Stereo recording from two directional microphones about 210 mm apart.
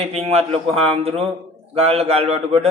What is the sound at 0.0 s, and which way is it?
A man's voice, 30° right (ahead or behind).